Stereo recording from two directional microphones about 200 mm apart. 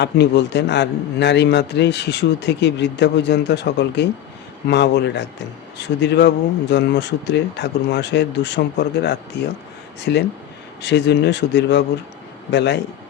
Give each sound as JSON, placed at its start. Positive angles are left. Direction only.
{"t": 0.0, "sound": "a man's voice", "side_deg": 60}